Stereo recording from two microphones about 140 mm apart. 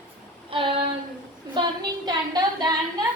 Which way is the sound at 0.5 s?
40° right (ahead or behind).